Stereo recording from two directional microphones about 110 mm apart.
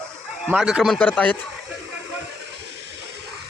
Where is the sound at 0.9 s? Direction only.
10° left (ahead or behind).